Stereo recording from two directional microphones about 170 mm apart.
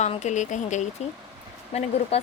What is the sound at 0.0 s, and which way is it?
Speech, 45° left (ahead or behind).